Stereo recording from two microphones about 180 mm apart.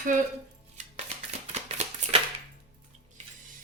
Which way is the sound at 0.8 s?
40° right (ahead or behind).